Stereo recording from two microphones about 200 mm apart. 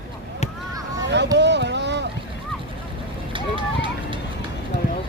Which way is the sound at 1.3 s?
60° right (ahead or behind).